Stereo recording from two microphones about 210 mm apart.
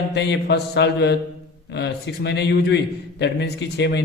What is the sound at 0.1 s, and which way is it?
A man's voice, 55° left (ahead or behind).